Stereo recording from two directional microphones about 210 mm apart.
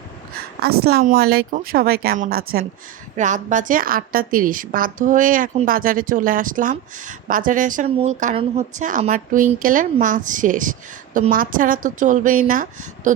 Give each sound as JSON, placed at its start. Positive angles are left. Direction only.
{"t": 0.9, "sound": "a woman's voice", "side_deg": -50}